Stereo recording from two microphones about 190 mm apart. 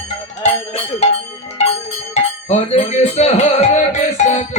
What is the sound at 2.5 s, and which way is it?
Music, 35° left (ahead or behind).